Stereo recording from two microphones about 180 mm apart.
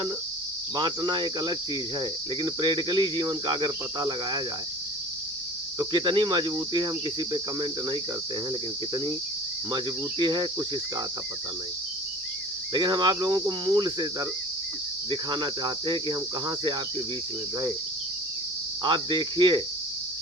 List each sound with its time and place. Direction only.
0.8 s cricket: 25° right (ahead or behind)
5.8 s cricket: 25° right (ahead or behind)
9.7 s cricket: 25° right (ahead or behind)
12.7 s cricket: 25° right (ahead or behind)
18.8 s cricket: 25° right (ahead or behind)